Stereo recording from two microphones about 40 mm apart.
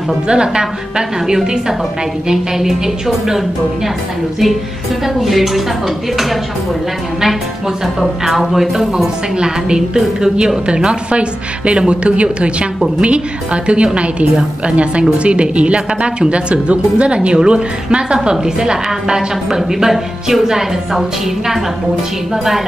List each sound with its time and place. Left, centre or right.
0.3 s a woman's voice: right
5.0 s a woman's voice: centre
8.0 s a woman's voice: centre
22.3 s a woman's voice: centre